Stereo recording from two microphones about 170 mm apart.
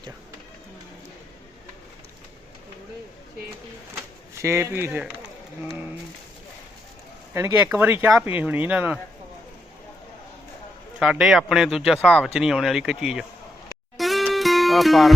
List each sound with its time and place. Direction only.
4.4 s speech: 15° right (ahead or behind)
7.3 s speech: 15° right (ahead or behind)
11.0 s speech: 5° right (ahead or behind)
13.9 s music: centre (ahead or behind)